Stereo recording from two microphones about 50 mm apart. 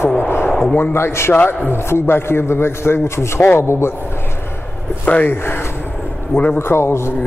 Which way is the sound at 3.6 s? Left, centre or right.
Left.